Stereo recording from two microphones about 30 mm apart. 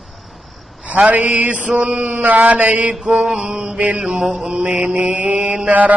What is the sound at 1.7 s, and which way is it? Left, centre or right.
Mantra, right.